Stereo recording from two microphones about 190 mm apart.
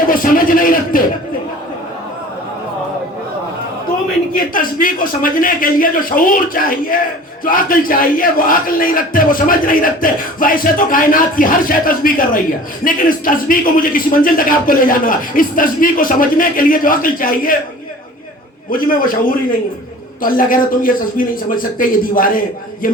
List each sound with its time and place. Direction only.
0.1 s a sound: 45° left (ahead or behind)
4.5 s a man's voice: 45° left (ahead or behind)
18.7 s a man's voice: 45° left (ahead or behind)